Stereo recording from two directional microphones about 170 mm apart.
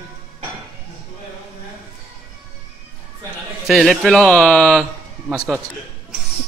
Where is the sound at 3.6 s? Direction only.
Centre (ahead or behind).